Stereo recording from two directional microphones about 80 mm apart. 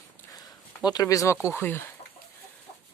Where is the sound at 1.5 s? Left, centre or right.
Left.